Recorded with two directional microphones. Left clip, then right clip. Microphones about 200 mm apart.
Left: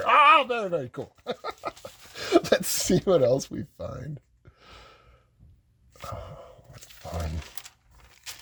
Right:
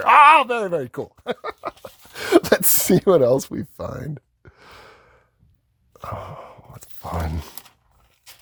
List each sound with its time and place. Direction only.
0.0 s speech: 35° right (ahead or behind)
1.6 s a sound: 40° right (ahead or behind)
6.1 s sigh: 45° right (ahead or behind)